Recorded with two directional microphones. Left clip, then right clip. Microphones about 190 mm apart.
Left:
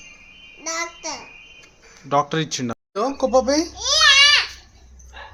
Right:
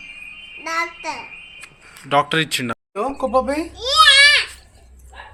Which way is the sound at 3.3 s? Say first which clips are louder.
Left 2 dB; 25° left (ahead or behind).